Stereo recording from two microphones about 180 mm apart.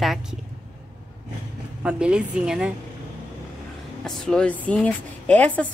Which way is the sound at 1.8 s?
5° right (ahead or behind).